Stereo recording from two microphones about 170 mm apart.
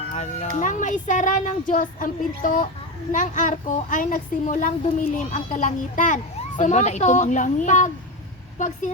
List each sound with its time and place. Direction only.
0.1 s a woman's voice: 45° left (ahead or behind)